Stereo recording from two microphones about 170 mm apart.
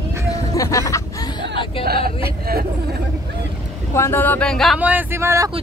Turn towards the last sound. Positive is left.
turn(degrees=-15)  # may be behind; listen again after turning